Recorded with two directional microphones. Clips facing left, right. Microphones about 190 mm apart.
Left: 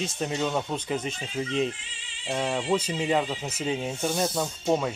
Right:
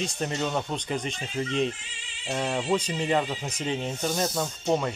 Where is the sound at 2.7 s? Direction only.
5° left (ahead or behind).